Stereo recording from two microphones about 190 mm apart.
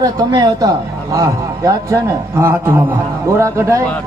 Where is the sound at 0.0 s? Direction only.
20° right (ahead or behind).